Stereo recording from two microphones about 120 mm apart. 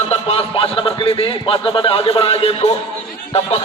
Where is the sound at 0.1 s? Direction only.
55° left (ahead or behind).